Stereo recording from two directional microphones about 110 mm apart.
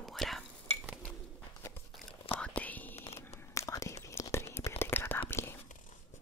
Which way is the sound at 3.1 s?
25° left (ahead or behind).